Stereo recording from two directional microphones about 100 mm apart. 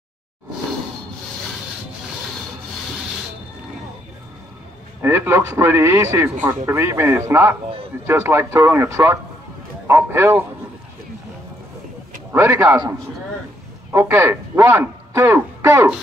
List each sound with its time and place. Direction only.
5.0 s a man's voice: 25° right (ahead or behind)
12.3 s a man's voice: 30° right (ahead or behind)
13.9 s a man's voice: 25° right (ahead or behind)